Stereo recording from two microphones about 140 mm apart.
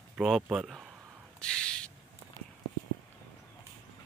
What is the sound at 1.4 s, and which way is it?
Owl, 5° left (ahead or behind).